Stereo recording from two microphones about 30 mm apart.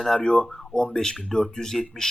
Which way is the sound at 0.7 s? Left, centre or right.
Left.